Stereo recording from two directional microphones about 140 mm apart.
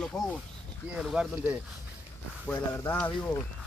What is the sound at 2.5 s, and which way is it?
Speech, 15° left (ahead or behind).